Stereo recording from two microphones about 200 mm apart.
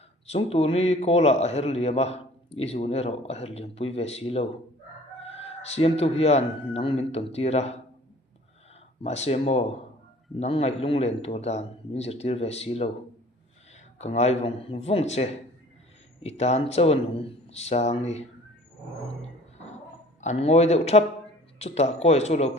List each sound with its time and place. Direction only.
0.3 s a man's voice: 30° left (ahead or behind)
9.0 s a man's voice: 35° left (ahead or behind)
14.0 s a man's voice: 35° left (ahead or behind)
20.2 s a man's voice: 30° left (ahead or behind)